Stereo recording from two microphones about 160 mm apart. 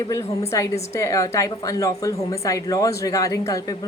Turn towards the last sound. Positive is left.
turn(degrees=20)  # may be behind; listen again after turning